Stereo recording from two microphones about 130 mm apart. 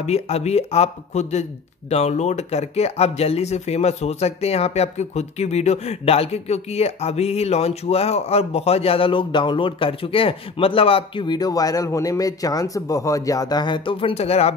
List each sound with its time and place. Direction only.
0.0 s speech: 55° left (ahead or behind)